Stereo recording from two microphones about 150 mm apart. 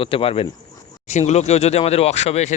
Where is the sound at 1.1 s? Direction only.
50° left (ahead or behind).